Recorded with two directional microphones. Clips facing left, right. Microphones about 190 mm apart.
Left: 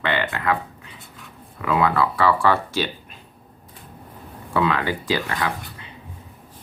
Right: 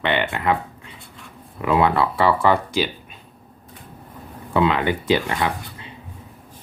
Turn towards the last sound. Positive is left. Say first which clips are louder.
# right 4 dB
turn(degrees=-20)  # may be behind; listen again after turning